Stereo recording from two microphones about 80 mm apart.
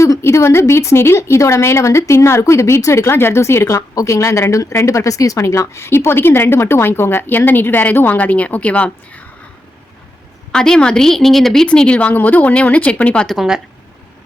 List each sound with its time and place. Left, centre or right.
0.0 s a woman's voice: left; by 9.2 s centre
10.5 s a woman's voice: centre
13.2 s speech: centre